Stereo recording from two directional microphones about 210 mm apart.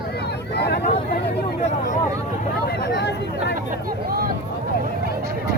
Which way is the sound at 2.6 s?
55° left (ahead or behind).